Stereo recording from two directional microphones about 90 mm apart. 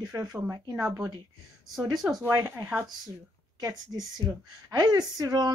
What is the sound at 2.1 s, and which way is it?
Speech, 35° right (ahead or behind).